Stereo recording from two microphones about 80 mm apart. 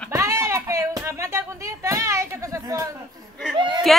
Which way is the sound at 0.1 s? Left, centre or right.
Right.